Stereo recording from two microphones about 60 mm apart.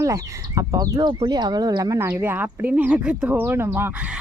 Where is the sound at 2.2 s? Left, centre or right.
Right.